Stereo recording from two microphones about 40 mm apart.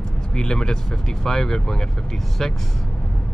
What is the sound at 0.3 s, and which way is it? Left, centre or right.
Speech, centre.